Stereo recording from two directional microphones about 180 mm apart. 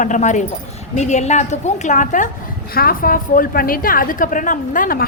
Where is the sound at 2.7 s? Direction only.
55° left (ahead or behind).